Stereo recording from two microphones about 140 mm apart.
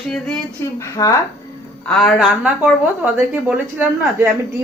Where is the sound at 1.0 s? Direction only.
30° left (ahead or behind).